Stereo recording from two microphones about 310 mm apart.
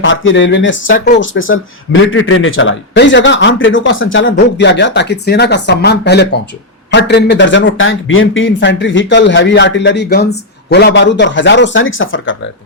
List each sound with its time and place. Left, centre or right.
0.0 s speech: left
0.9 s speech: left
1.2 s speech: left